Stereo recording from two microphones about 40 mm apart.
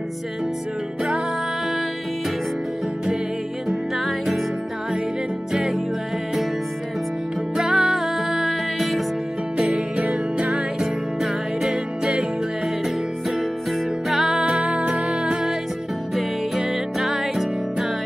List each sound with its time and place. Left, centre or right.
3.6 s music: centre
5.5 s music: centre
7.5 s music: centre
9.9 s music: right
11.6 s music: centre
14.0 s music: centre
14.4 s music: right
16.2 s music: centre